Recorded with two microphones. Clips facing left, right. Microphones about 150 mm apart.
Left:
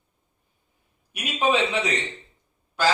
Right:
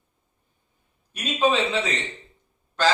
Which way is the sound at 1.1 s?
15° left (ahead or behind).